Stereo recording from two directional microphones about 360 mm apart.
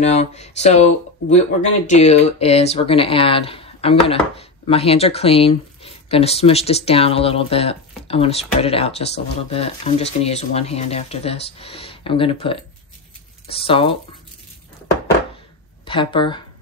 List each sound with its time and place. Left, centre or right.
0.0 s speech: centre
15.9 s speech: centre